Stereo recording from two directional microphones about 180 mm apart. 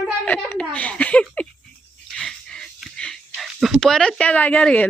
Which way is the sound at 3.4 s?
Centre (ahead or behind).